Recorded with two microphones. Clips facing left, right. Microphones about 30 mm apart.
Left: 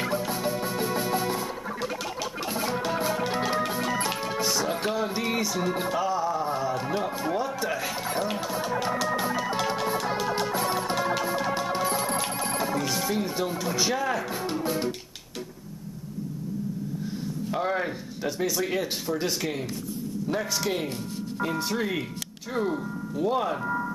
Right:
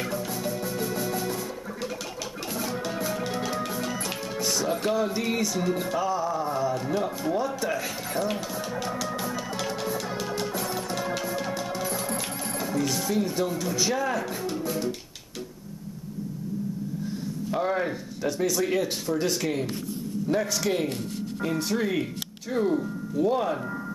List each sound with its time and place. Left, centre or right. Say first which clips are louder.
0.0 s music: left 2 dB; left
2.5 s music: left 2 dB; left
6.9 s speech: right 1 dB; centre
8.5 s music: left 3 dB; centre
13.5 s speech: even; centre
17.5 s a man's voice: right 1 dB; centre